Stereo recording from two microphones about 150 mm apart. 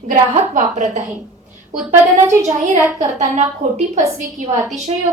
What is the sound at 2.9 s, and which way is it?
Speech, 55° right (ahead or behind).